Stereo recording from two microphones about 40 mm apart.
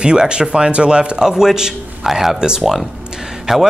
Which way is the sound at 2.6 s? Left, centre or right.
Centre.